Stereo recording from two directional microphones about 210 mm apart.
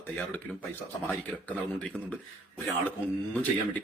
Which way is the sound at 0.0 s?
10° left (ahead or behind).